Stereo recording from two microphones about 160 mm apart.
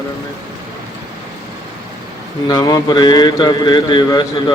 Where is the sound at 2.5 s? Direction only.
25° left (ahead or behind).